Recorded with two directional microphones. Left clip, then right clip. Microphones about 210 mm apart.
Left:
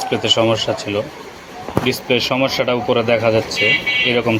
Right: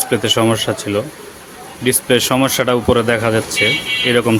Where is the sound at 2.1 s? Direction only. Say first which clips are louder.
Right 3 dB; 40° right (ahead or behind).